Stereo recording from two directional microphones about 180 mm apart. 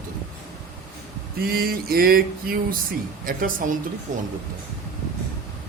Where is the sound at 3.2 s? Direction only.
50° right (ahead or behind).